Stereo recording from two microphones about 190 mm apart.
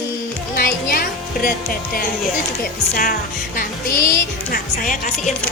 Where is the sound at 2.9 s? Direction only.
50° left (ahead or behind).